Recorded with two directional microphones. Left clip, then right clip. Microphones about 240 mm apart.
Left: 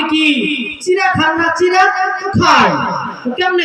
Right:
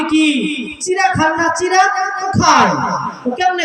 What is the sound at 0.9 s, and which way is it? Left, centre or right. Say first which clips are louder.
Speech: even; left.